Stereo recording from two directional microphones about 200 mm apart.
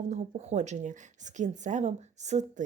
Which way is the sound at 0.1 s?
35° right (ahead or behind).